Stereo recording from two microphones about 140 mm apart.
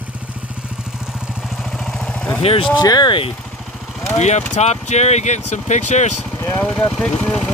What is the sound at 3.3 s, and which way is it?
Vehicle, 5° left (ahead or behind).